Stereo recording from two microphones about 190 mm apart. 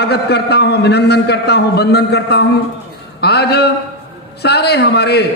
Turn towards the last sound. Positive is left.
turn(degrees=60)  # may be behind; listen again after turning